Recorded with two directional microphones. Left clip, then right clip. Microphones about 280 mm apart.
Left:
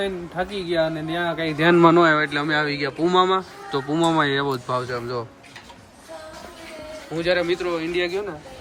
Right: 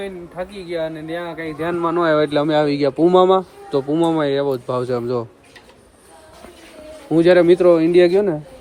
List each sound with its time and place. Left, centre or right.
0.0 s speech: centre
1.5 s speech: left
2.1 s speech: centre
7.2 s a man's voice: right